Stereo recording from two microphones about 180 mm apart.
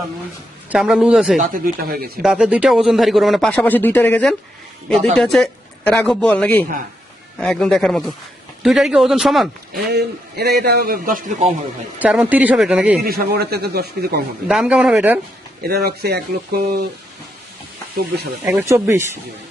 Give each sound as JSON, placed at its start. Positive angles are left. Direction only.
{"t": 0.7, "sound": "a man's voice", "side_deg": 0}
{"t": 1.4, "sound": "speech", "side_deg": -50}
{"t": 2.2, "sound": "a man's voice", "side_deg": -5}
{"t": 9.8, "sound": "a man's voice", "side_deg": -65}
{"t": 11.9, "sound": "speech", "side_deg": -10}
{"t": 13.1, "sound": "a man's voice", "side_deg": -60}
{"t": 14.4, "sound": "speech", "side_deg": -5}
{"t": 15.6, "sound": "a man's voice", "side_deg": -60}
{"t": 18.7, "sound": "speech", "side_deg": -15}